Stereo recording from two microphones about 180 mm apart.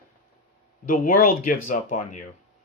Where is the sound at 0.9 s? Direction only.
50° left (ahead or behind).